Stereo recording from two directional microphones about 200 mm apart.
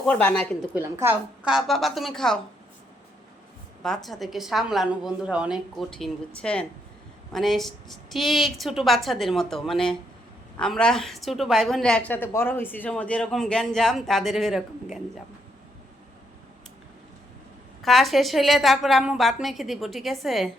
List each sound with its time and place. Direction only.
0.0 s a woman's voice: 5° left (ahead or behind)
0.7 s a woman's voice: 10° right (ahead or behind)
3.8 s a woman's voice: centre (ahead or behind)
17.8 s a woman's voice: centre (ahead or behind)